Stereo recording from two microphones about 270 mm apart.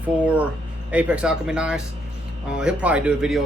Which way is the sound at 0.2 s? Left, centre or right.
Centre.